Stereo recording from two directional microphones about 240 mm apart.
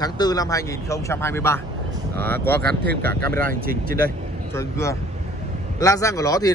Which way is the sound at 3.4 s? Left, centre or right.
Right.